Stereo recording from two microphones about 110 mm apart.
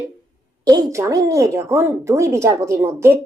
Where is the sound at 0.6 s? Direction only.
35° right (ahead or behind).